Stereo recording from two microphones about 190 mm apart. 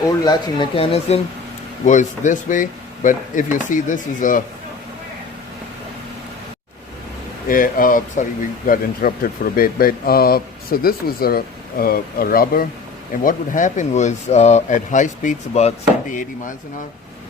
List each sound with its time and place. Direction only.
0.3 s speech: 25° left (ahead or behind)
1.8 s speech: 40° left (ahead or behind)
7.4 s speech: 45° left (ahead or behind)